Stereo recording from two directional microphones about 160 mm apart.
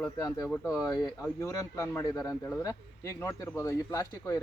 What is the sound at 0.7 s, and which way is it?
Speech, 20° left (ahead or behind).